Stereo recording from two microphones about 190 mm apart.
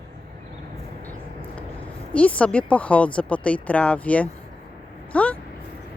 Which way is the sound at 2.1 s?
5° left (ahead or behind).